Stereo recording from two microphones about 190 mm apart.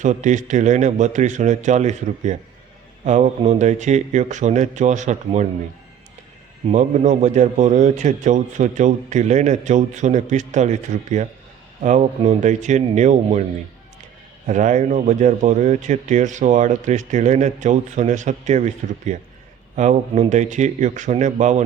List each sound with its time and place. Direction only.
0.0 s speech: 40° right (ahead or behind)
6.7 s speech: 40° right (ahead or behind)
14.4 s speech: 40° right (ahead or behind)